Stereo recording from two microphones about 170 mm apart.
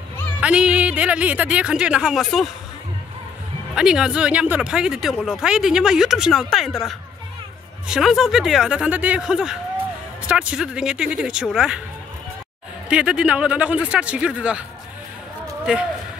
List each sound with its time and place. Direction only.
0.4 s a woman's voice: 5° right (ahead or behind)
3.7 s speech: 5° right (ahead or behind)
7.9 s speech: centre (ahead or behind)
12.9 s a woman's voice: 5° right (ahead or behind)
15.6 s speech: 5° right (ahead or behind)